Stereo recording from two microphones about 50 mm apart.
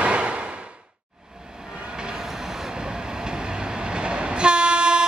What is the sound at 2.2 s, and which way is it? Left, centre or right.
Train, centre.